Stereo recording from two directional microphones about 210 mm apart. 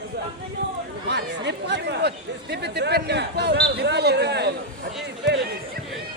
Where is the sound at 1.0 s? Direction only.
55° right (ahead or behind).